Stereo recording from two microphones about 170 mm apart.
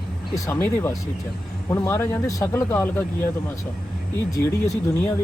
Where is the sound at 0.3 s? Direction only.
20° left (ahead or behind).